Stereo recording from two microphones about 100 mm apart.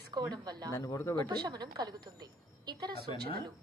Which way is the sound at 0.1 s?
45° right (ahead or behind).